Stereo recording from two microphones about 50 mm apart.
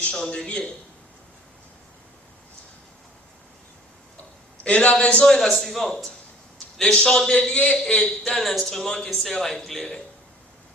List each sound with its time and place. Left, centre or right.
0.1 s a man's voice: centre
4.6 s a man's voice: left
5.2 s a man's voice: centre
8.4 s speech: centre